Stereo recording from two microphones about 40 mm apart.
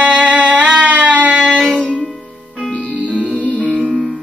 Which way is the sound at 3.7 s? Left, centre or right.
Centre.